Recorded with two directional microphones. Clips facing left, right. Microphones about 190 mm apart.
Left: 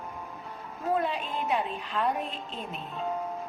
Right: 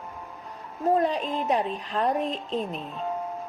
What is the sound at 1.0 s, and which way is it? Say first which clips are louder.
A woman's voice: right 5 dB; 40° right (ahead or behind).